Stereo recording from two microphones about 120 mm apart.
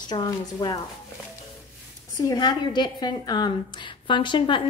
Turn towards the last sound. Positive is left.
turn(degrees=40)  # may be behind; listen again after turning